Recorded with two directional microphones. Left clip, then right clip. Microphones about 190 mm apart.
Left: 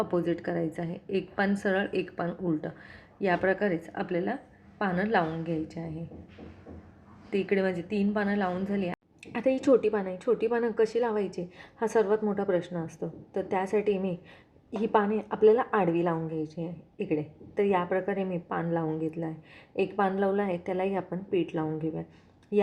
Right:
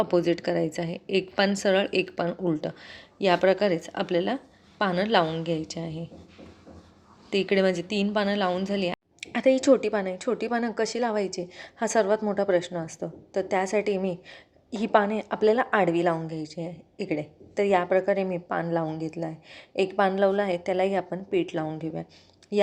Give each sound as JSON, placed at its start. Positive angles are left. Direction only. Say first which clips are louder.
{"t": 0.0, "sound": "a woman's voice", "louder": "right 5 dB", "side_deg": -25}
{"t": 7.3, "sound": "a woman's voice", "louder": "right 4 dB", "side_deg": -35}
{"t": 9.2, "sound": "a woman's voice", "louder": "right 5 dB", "side_deg": -20}